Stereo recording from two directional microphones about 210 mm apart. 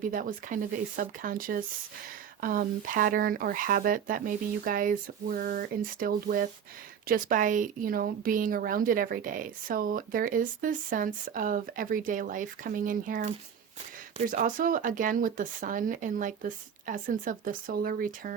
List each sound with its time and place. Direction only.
0.1 s speech: 40° right (ahead or behind)